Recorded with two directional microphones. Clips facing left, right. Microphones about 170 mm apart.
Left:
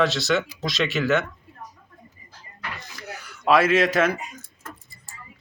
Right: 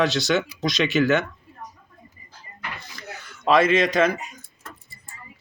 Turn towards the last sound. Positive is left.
turn(degrees=5)  # may be behind; listen again after turning